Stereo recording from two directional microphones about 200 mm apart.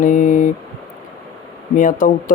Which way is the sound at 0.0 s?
40° left (ahead or behind).